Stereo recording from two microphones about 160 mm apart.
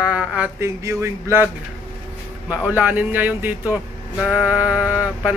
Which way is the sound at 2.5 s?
10° right (ahead or behind).